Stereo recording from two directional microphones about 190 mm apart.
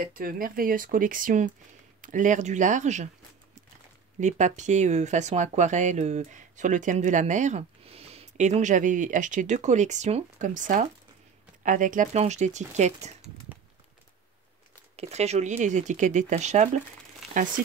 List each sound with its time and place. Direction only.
0.0 s speech: 50° right (ahead or behind)
4.2 s speech: 40° right (ahead or behind)
15.0 s speech: 35° right (ahead or behind)